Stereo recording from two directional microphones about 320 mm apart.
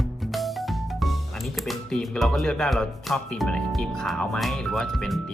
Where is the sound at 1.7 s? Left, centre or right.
Centre.